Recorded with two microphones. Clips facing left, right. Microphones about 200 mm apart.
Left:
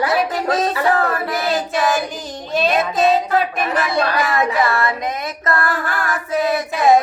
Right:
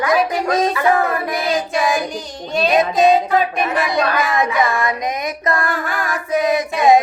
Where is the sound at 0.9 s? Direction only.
15° right (ahead or behind).